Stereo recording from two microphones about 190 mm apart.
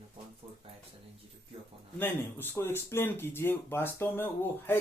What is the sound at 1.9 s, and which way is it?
Speech, 10° left (ahead or behind).